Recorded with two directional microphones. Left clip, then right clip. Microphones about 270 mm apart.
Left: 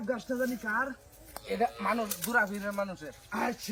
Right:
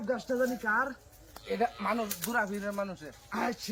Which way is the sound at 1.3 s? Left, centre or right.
Centre.